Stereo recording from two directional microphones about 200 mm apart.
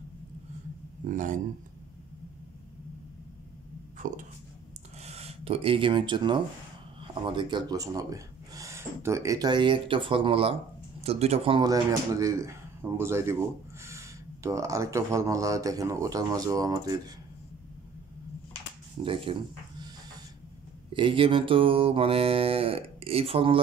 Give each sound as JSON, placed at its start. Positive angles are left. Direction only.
{"t": 1.0, "sound": "speech", "side_deg": -40}
{"t": 5.0, "sound": "speech", "side_deg": -30}
{"t": 19.0, "sound": "mantra", "side_deg": -25}
{"t": 20.9, "sound": "mantra", "side_deg": -25}